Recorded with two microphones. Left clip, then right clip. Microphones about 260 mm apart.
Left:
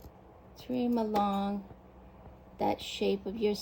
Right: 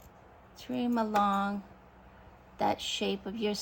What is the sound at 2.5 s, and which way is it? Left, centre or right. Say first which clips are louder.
Speech: right 2 dB; centre.